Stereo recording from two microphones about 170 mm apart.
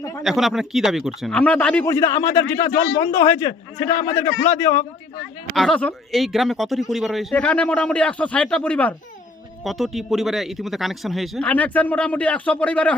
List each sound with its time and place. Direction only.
0.2 s a man's voice: centre (ahead or behind); by 4.7 s 15° left (ahead or behind)
5.5 s speech: 5° left (ahead or behind)